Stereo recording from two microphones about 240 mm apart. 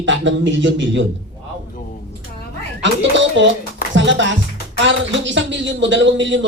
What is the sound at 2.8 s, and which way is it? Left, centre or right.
Speech, right.